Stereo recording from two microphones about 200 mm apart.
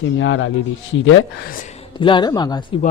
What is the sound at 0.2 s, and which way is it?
Speech, 75° left (ahead or behind).